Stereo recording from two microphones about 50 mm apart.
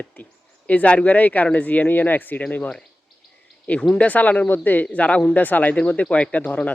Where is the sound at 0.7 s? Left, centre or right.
Left.